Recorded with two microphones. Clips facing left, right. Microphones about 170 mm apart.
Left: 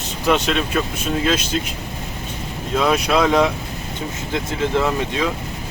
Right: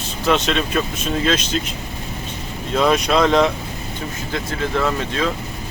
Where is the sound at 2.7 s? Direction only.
5° left (ahead or behind).